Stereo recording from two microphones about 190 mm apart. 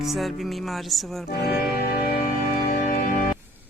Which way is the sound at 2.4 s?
50° left (ahead or behind).